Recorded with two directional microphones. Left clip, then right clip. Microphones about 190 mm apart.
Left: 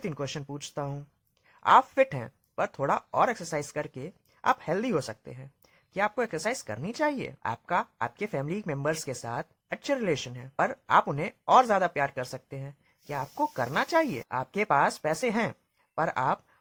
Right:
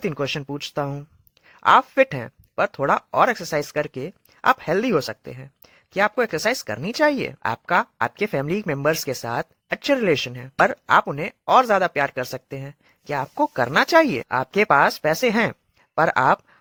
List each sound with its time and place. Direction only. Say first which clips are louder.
0.0 s speech: right 10 dB; 30° right (ahead or behind)